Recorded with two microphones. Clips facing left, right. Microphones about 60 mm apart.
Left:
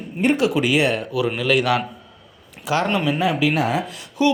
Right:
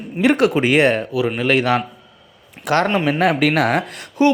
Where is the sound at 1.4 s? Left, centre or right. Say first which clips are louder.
Right 2 dB; right.